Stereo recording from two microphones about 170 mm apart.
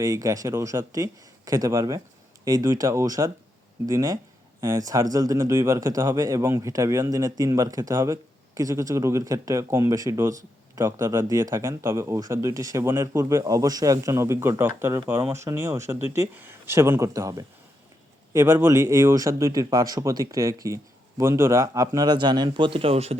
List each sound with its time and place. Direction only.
0.0 s speech: 20° right (ahead or behind)